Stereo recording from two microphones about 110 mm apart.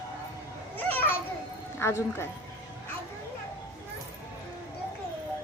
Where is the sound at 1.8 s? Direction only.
20° left (ahead or behind).